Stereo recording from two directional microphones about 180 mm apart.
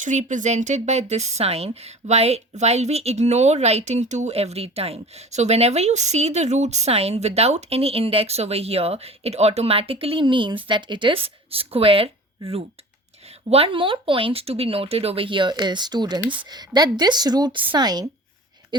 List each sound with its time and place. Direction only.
0.0 s speech: 45° right (ahead or behind); by 18.9 s 25° right (ahead or behind)